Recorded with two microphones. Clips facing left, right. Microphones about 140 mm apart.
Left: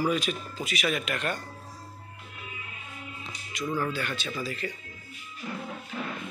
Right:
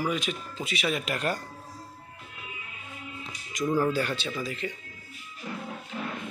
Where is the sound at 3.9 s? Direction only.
30° right (ahead or behind).